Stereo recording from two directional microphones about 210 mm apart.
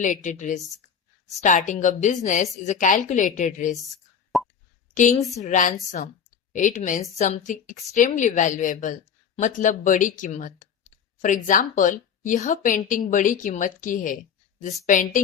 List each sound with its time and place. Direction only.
0.0 s a woman's voice: 35° left (ahead or behind)
4.3 s plop: centre (ahead or behind)
4.9 s a woman's voice: 35° left (ahead or behind)